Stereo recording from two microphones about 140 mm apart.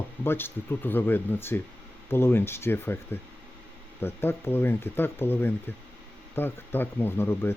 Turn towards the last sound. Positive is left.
turn(degrees=15)  # may be behind; listen again after turning